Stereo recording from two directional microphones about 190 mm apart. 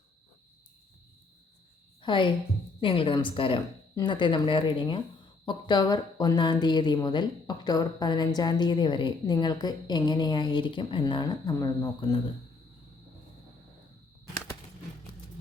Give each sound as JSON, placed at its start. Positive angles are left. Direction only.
{"t": 2.0, "sound": "a woman's voice", "side_deg": 25}